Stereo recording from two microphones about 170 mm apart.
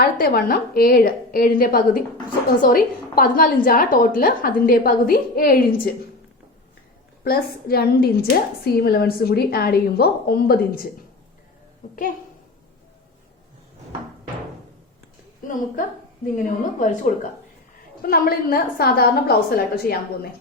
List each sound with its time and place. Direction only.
0.0 s a woman's voice: 65° left (ahead or behind)
7.3 s a woman's voice: 65° left (ahead or behind)
16.4 s a woman's voice: 50° left (ahead or behind)
18.0 s a woman's voice: 60° left (ahead or behind)